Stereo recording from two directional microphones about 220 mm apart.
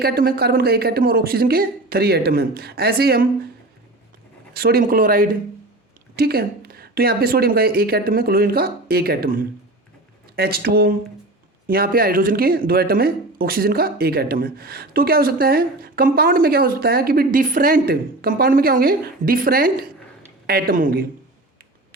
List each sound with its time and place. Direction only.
0.0 s speech: 45° right (ahead or behind)
4.5 s speech: 45° right (ahead or behind)